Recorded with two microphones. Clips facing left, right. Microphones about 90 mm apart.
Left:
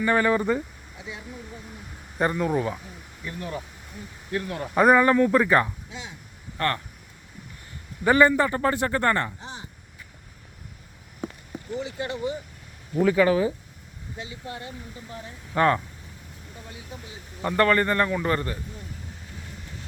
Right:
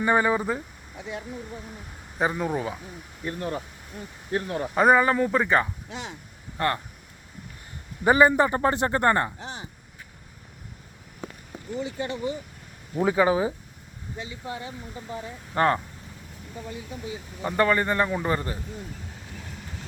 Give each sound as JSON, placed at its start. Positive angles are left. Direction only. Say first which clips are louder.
{"t": 0.0, "sound": "speech", "louder": "even", "side_deg": -15}
{"t": 0.9, "sound": "speech", "louder": "right 4 dB", "side_deg": -55}
{"t": 2.1, "sound": "speech", "louder": "left 2 dB", "side_deg": -10}
{"t": 3.2, "sound": "speech", "louder": "right 3 dB", "side_deg": -40}
{"t": 4.3, "sound": "speech", "louder": "right 2 dB", "side_deg": -30}
{"t": 4.7, "sound": "speech", "louder": "left 2 dB", "side_deg": 0}
{"t": 5.9, "sound": "a sound", "louder": "right 3 dB", "side_deg": -60}
{"t": 6.6, "sound": "speech", "louder": "right 1 dB", "side_deg": -15}
{"t": 8.0, "sound": "speech", "louder": "even", "side_deg": -15}
{"t": 9.4, "sound": "a sound", "louder": "right 2 dB", "side_deg": -70}
{"t": 13.0, "sound": "speech", "louder": "left 2 dB", "side_deg": -20}
{"t": 15.5, "sound": "speech", "louder": "left 1 dB", "side_deg": -5}
{"t": 17.4, "sound": "speech", "louder": "left 2 dB", "side_deg": -10}